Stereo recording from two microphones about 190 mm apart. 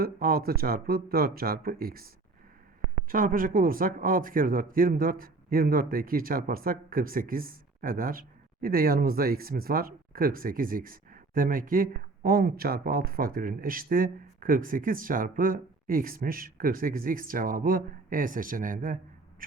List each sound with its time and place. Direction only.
0.0 s speech: 50° right (ahead or behind)
3.1 s speech: 50° right (ahead or behind)
19.4 s a sound: 50° right (ahead or behind)